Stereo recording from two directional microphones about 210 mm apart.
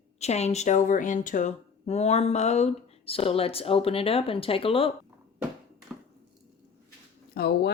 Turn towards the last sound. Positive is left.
turn(degrees=50)  # may be behind; listen again after turning